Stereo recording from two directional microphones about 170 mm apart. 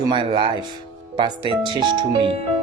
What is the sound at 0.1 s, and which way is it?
Speech, 30° right (ahead or behind).